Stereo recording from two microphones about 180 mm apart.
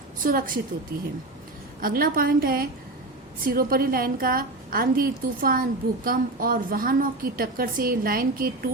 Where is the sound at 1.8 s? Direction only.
55° right (ahead or behind).